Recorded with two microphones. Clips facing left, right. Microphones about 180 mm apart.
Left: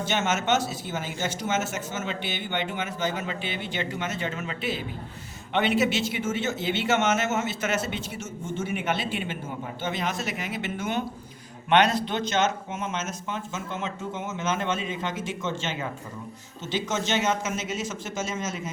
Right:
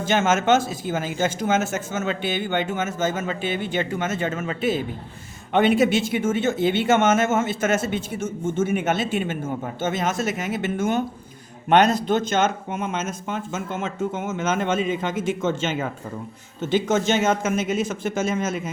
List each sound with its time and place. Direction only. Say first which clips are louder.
0.1 s speech: right 7 dB; 50° right (ahead or behind)